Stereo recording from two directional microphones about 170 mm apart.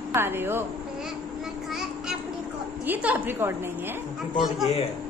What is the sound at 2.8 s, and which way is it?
Speech, 10° right (ahead or behind).